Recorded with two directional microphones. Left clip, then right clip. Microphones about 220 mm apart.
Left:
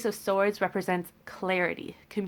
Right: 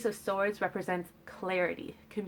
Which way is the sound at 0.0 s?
30° left (ahead or behind).